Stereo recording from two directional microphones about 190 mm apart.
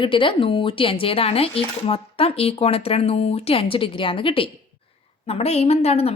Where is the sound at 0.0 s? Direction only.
25° left (ahead or behind).